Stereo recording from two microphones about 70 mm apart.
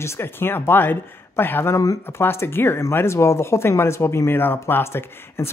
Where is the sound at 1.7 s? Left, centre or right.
Left.